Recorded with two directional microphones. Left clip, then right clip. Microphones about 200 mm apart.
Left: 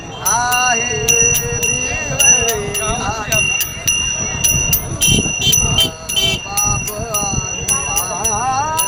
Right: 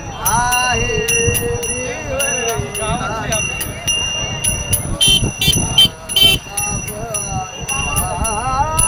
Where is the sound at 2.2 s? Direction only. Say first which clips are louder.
Left 8 dB; 45° left (ahead or behind).